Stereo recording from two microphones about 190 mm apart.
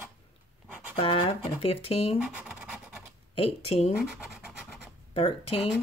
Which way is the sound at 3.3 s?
30° left (ahead or behind).